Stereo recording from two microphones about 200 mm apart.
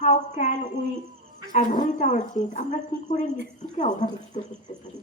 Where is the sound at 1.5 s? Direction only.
40° left (ahead or behind).